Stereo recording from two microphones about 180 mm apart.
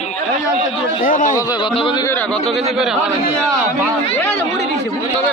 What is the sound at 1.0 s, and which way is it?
Speech, 50° left (ahead or behind).